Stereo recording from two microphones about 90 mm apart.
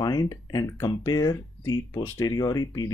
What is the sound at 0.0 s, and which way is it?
Speech, 45° left (ahead or behind).